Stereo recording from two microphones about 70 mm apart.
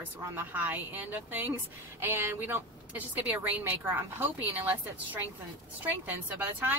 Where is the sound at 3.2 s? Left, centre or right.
Right.